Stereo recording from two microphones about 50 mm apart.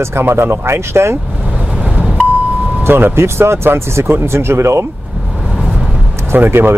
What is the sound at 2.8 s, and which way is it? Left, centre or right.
Speech, right.